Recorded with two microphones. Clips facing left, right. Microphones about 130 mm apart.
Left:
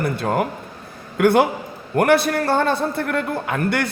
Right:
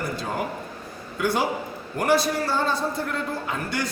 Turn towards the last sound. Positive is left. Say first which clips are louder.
# left 7 dB
turn(degrees=60)  # may be behind; listen again after turning